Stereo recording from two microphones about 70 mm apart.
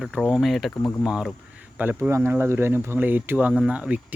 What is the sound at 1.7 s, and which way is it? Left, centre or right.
Speech, right.